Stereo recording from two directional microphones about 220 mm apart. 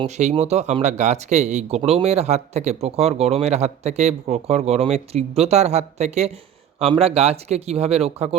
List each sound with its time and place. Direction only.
0.0 s speech: 30° right (ahead or behind)